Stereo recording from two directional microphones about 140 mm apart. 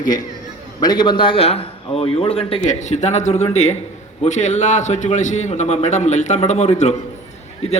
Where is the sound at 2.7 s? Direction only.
55° left (ahead or behind).